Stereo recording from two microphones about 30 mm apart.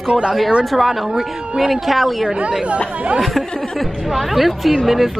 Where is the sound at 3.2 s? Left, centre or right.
Centre.